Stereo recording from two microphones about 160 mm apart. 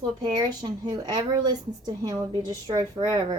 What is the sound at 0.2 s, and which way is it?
A woman's voice, 25° right (ahead or behind).